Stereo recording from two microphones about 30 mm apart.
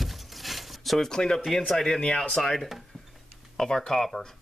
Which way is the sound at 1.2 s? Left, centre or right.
Left.